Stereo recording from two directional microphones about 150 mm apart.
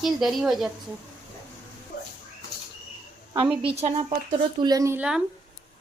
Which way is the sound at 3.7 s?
40° right (ahead or behind).